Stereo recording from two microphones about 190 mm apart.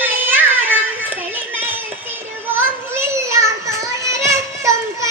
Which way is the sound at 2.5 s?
10° right (ahead or behind).